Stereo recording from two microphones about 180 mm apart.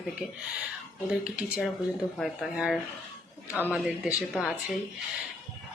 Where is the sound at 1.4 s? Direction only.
5° right (ahead or behind).